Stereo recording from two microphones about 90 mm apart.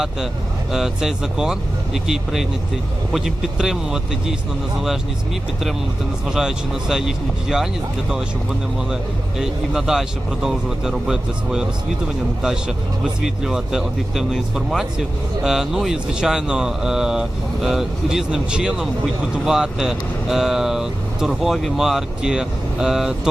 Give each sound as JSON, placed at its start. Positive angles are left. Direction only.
{"t": 0.7, "sound": "speech", "side_deg": -5}
{"t": 6.2, "sound": "speech", "side_deg": -5}
{"t": 9.4, "sound": "speech", "side_deg": -5}